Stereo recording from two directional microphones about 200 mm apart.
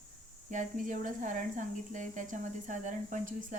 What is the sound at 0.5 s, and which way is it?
Speech, 40° right (ahead or behind).